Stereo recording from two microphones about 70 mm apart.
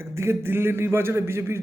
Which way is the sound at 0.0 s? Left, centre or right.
Right.